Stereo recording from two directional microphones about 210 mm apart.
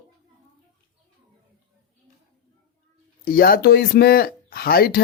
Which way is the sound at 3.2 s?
45° left (ahead or behind).